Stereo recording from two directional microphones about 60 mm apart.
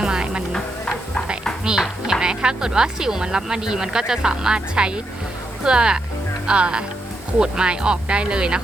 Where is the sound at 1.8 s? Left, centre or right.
Centre.